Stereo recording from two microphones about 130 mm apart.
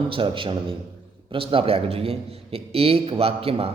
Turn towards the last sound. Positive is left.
turn(degrees=-45)  # may be behind; listen again after turning